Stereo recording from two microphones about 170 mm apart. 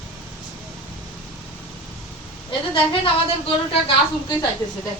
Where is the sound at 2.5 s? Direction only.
30° left (ahead or behind).